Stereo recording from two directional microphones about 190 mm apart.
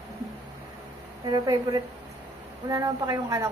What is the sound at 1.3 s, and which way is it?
A woman's voice, 20° right (ahead or behind).